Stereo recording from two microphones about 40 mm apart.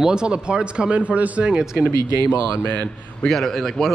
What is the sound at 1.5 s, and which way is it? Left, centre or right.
Speech, centre.